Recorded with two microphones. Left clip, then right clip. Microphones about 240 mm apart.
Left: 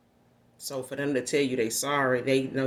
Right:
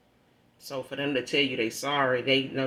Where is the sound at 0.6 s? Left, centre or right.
Left.